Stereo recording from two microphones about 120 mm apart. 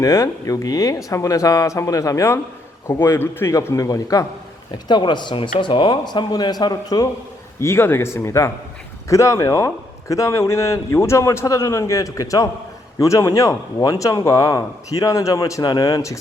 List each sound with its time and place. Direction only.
0.0 s a man's voice: 30° left (ahead or behind)
7.6 s a man's voice: 20° left (ahead or behind)